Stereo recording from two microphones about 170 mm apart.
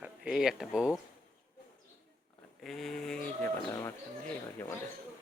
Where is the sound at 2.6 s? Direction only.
Centre (ahead or behind).